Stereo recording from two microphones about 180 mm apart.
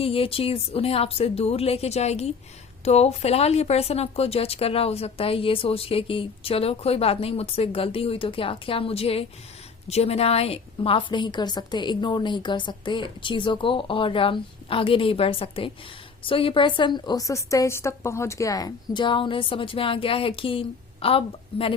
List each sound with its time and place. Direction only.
0.0 s a woman's voice: 30° left (ahead or behind)